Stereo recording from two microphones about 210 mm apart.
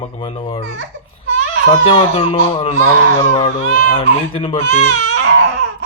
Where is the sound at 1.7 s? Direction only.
25° left (ahead or behind).